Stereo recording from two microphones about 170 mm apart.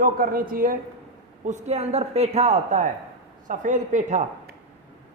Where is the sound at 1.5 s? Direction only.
45° right (ahead or behind).